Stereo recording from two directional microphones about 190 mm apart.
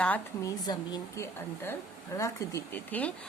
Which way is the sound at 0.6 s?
20° left (ahead or behind).